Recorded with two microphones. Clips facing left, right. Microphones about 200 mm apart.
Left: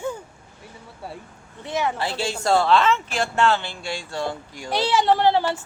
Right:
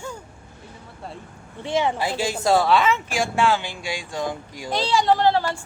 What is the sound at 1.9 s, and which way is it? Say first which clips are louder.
Speech: right 2 dB; 10° right (ahead or behind).